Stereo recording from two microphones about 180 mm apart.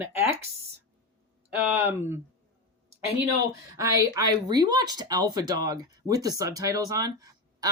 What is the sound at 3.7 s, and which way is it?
Speech, 15° right (ahead or behind).